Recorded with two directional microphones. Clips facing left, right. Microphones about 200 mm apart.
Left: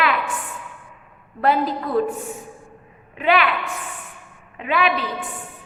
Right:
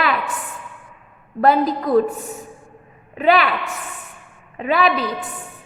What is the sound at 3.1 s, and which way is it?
Speech, 40° right (ahead or behind).